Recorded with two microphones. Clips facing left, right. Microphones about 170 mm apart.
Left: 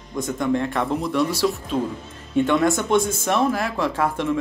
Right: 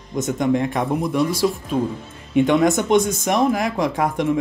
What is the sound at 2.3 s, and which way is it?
Speech, 15° right (ahead or behind).